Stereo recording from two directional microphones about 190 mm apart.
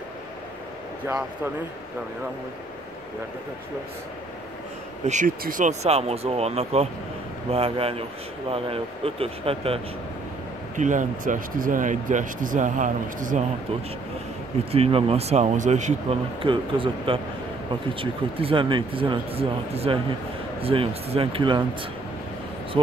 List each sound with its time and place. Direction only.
1.0 s speech: 10° right (ahead or behind)
5.0 s speech: 40° right (ahead or behind)
10.8 s speech: 40° right (ahead or behind)
14.7 s speech: 30° right (ahead or behind)
16.4 s speech: 25° right (ahead or behind)